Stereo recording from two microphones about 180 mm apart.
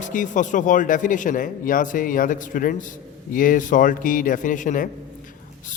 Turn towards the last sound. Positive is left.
turn(degrees=50)  # may be behind; listen again after turning